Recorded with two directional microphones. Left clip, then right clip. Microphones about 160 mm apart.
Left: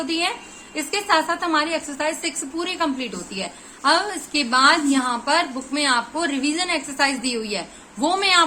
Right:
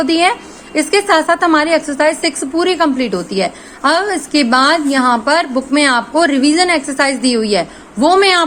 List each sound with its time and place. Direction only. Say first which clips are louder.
0.0 s a woman's voice: right 11 dB; 40° right (ahead or behind)